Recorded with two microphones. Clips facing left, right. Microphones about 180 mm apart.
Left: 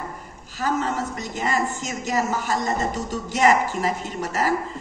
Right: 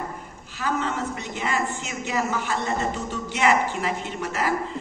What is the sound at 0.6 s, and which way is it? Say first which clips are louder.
A woman's voice: left 2 dB; 40° left (ahead or behind).